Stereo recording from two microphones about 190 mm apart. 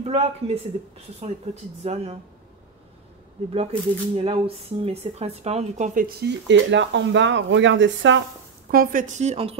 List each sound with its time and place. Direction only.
0.0 s a woman's voice: 35° right (ahead or behind)
3.5 s speech: 30° right (ahead or behind); by 8.2 s 80° right
8.6 s a woman's voice: 50° right (ahead or behind); by 9.6 s 35° right (ahead or behind)